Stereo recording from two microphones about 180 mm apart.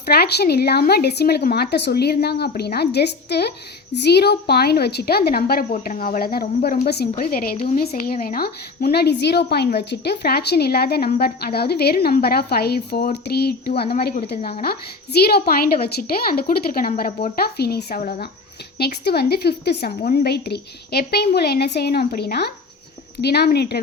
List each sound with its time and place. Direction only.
0.0 s speech: 60° left (ahead or behind)
17.8 s speech: 50° left (ahead or behind)
18.8 s speech: 65° left (ahead or behind)